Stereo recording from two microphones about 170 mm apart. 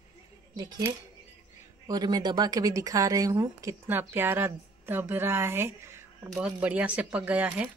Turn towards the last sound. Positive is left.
turn(degrees=-10)  # may be behind; listen again after turning